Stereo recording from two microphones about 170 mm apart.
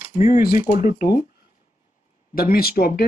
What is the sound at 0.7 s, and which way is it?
Speech, 50° left (ahead or behind).